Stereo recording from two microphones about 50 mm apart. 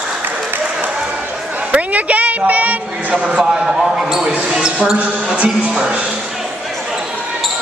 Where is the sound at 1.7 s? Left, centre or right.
Right.